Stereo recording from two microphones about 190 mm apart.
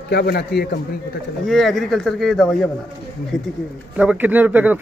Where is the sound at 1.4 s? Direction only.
Centre (ahead or behind).